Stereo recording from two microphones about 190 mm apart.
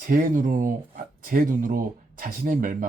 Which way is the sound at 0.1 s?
45° right (ahead or behind).